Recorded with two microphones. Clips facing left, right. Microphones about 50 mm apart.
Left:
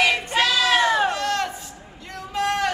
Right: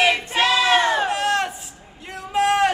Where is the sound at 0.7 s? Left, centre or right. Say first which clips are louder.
Right 1 dB; centre.